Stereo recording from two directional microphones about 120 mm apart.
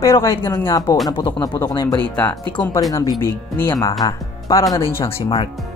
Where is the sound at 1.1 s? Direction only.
45° left (ahead or behind).